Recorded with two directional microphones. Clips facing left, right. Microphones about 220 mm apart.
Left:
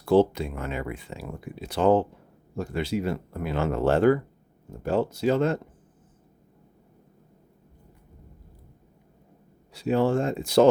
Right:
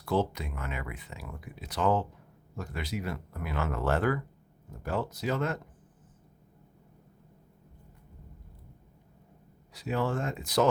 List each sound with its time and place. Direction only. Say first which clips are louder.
0.0 s speech: left 9 dB; 30° left (ahead or behind)
9.7 s speech: left 8 dB; 30° left (ahead or behind)